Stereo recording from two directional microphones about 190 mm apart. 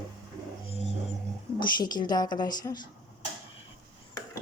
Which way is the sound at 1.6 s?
20° left (ahead or behind).